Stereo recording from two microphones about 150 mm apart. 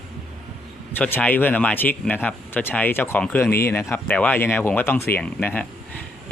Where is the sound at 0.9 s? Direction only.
10° left (ahead or behind).